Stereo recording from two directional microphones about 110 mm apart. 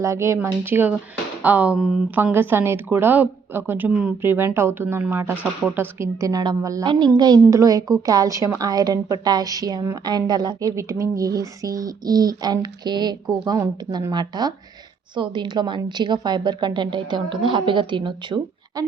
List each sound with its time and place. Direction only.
0.0 s a woman's voice: 25° right (ahead or behind); by 2.0 s 5° right (ahead or behind)
2.1 s a woman's voice: 15° right (ahead or behind); by 18.3 s 45° right (ahead or behind)